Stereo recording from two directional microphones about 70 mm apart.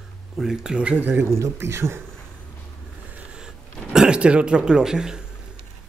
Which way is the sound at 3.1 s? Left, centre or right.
Centre.